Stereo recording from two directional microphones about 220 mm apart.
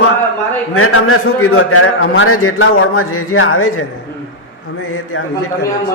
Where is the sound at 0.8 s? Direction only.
70° left (ahead or behind).